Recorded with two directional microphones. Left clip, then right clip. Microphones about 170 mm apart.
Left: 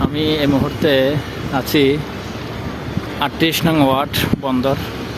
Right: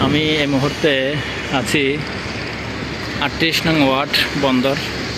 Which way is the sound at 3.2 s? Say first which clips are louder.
Even; 20° left (ahead or behind).